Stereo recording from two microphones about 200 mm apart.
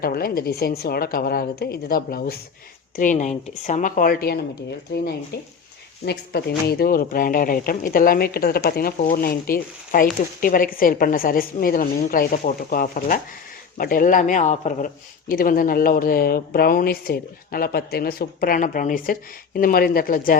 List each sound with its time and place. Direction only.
0.0 s speech: 50° left (ahead or behind)
6.1 s speech: 55° left (ahead or behind)